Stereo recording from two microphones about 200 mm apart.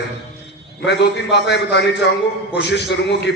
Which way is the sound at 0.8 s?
55° left (ahead or behind).